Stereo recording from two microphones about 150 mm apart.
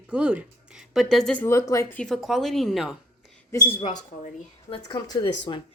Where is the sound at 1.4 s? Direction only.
20° left (ahead or behind).